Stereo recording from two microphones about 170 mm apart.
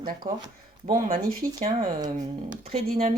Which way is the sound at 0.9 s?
45° right (ahead or behind).